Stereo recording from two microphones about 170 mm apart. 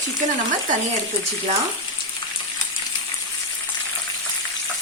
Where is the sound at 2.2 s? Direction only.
25° left (ahead or behind).